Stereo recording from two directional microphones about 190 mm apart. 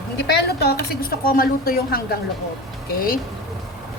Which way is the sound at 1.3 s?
50° left (ahead or behind).